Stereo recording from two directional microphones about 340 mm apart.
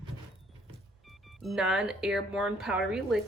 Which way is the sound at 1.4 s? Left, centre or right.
Centre.